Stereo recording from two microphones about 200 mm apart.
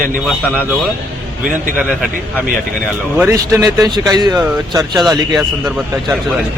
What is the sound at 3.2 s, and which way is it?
Speech, 15° right (ahead or behind).